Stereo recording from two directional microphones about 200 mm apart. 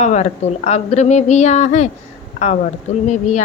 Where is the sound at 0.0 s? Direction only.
35° left (ahead or behind).